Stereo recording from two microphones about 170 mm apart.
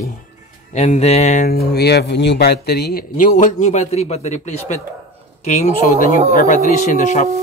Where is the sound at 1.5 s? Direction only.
70° left (ahead or behind).